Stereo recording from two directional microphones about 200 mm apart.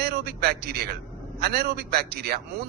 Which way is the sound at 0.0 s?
50° right (ahead or behind).